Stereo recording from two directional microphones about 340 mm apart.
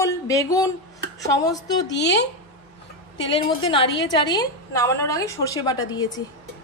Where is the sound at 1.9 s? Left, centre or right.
Left.